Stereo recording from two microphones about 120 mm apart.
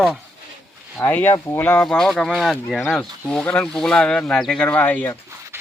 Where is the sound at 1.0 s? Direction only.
15° left (ahead or behind).